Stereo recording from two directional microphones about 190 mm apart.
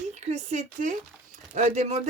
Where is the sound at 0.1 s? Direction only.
35° right (ahead or behind).